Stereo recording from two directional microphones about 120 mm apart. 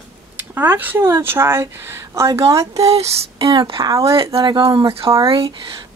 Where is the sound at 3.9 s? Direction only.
25° right (ahead or behind).